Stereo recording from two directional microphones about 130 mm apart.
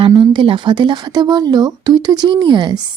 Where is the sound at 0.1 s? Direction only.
35° right (ahead or behind).